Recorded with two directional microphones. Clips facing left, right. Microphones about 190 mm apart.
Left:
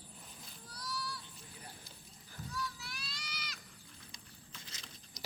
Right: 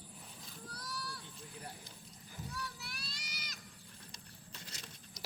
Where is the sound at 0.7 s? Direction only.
55° right (ahead or behind).